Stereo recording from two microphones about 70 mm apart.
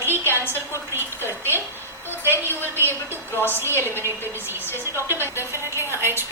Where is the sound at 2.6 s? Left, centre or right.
Left.